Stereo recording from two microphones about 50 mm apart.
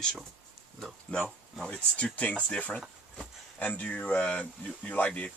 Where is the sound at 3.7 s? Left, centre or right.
Left.